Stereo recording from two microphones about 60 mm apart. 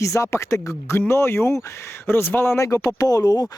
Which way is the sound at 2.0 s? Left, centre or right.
Left.